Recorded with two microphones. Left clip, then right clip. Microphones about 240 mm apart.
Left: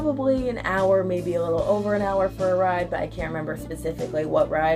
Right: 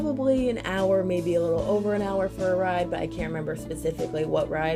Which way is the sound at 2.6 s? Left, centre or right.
Right.